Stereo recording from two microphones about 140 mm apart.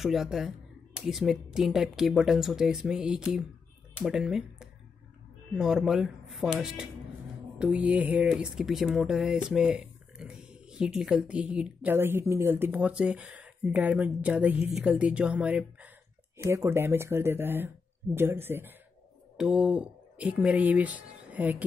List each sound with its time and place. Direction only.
0.0 s speech: centre (ahead or behind)